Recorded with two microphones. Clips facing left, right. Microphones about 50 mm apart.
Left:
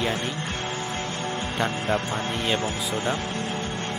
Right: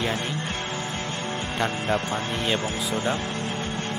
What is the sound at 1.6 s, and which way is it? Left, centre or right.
Speech, centre.